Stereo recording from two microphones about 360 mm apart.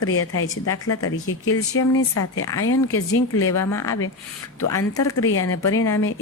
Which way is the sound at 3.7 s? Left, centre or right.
Centre.